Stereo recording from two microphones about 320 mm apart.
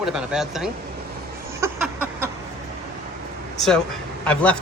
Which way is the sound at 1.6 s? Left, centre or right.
Centre.